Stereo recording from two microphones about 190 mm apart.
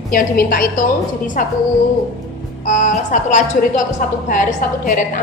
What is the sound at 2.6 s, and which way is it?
A woman's voice, 40° left (ahead or behind).